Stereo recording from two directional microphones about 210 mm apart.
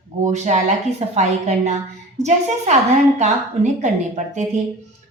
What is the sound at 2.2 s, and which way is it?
A woman's voice, 35° right (ahead or behind).